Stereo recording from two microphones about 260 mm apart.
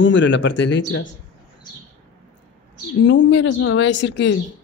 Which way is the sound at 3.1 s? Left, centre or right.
Left.